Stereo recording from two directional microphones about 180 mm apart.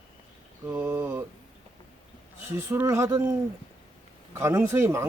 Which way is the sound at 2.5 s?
15° right (ahead or behind).